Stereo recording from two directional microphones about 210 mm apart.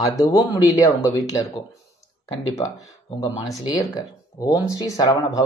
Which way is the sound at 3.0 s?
20° left (ahead or behind).